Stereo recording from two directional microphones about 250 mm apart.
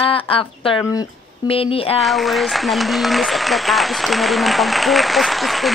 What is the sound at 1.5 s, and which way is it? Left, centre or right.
Speech, left.